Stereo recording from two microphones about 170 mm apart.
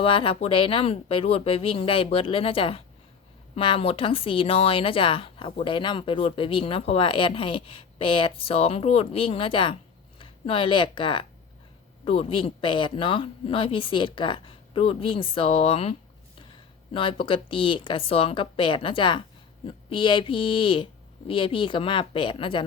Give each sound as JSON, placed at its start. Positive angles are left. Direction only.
{"t": 0.0, "sound": "a woman's voice", "side_deg": 30}